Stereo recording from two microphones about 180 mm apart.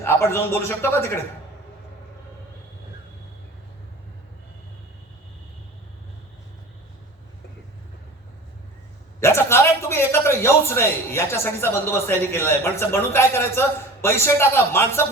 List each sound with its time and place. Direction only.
0.0 s a man's voice: 15° left (ahead or behind)
9.2 s a man's voice: 15° left (ahead or behind)